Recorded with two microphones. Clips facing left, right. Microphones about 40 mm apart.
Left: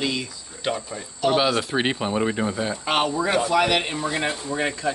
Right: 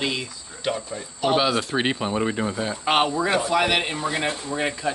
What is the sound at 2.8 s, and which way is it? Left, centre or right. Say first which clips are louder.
Speech: right 2 dB; centre.